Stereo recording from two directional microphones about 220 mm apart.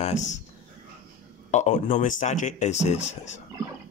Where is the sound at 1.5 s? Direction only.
35° left (ahead or behind).